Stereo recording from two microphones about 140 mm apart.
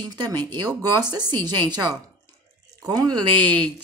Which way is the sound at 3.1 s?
10° left (ahead or behind).